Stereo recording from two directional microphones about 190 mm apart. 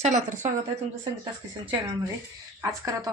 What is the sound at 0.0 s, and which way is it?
Speech, 40° right (ahead or behind).